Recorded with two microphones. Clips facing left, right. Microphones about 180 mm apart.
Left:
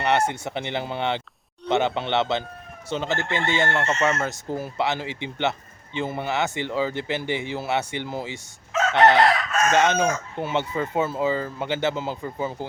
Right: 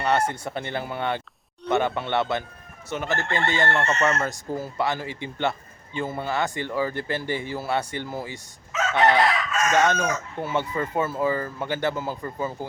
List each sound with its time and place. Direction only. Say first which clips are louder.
0.0 s a man's voice: left 1 dB; 20° left (ahead or behind)
4.3 s a man's voice: left 1 dB; 20° left (ahead or behind)